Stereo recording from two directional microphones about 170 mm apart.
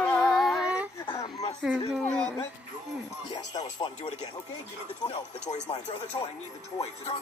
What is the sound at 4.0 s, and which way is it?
Speech, 40° left (ahead or behind).